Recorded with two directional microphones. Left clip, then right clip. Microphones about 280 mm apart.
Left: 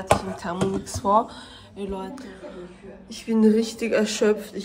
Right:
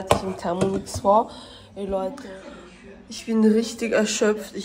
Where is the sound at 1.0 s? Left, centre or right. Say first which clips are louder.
Right 2 dB; left.